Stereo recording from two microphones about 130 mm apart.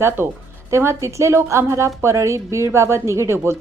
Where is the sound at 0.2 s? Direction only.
15° right (ahead or behind).